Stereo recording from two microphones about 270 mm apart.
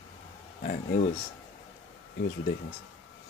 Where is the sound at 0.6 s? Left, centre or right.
Left.